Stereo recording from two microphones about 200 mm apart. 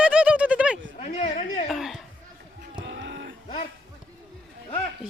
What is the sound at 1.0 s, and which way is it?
Speech, 35° left (ahead or behind).